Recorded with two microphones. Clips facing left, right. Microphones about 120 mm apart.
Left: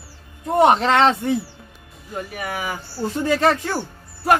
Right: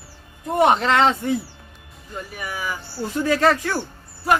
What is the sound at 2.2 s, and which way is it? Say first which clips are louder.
Speech: left 3 dB; 60° left (ahead or behind).